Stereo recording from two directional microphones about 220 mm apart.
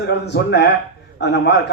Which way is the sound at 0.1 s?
50° left (ahead or behind).